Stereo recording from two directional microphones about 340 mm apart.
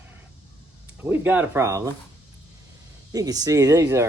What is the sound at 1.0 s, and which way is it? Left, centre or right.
Speech, centre.